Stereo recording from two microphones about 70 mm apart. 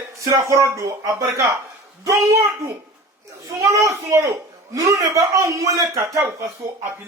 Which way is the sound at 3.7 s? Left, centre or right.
Right.